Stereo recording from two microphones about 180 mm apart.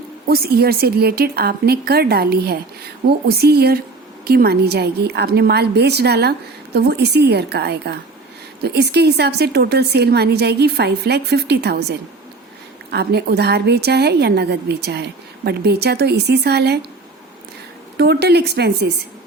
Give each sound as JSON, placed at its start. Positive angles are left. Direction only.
{"t": 0.3, "sound": "a woman's voice", "side_deg": -60}
{"t": 17.9, "sound": "a woman's voice", "side_deg": -65}